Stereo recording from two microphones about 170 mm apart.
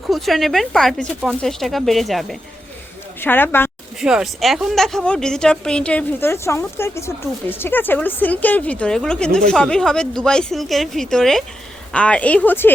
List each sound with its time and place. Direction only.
0.1 s speech: centre (ahead or behind)
3.2 s a woman's voice: 10° left (ahead or behind)
4.0 s a woman's voice: centre (ahead or behind)